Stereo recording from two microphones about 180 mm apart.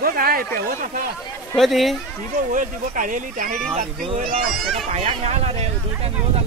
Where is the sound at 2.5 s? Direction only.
45° right (ahead or behind).